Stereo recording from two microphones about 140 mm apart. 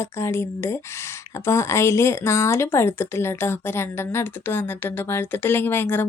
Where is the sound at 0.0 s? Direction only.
20° left (ahead or behind).